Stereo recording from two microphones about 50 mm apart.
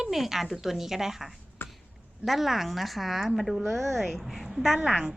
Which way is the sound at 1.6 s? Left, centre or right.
Left.